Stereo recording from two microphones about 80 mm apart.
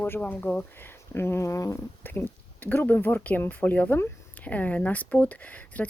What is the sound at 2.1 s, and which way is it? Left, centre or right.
Speech, left.